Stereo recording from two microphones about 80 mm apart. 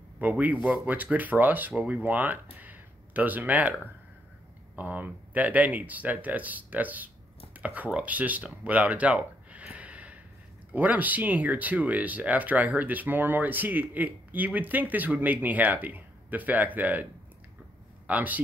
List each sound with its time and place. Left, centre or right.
0.2 s speech: right
8.6 s a sound: centre
10.7 s speech: right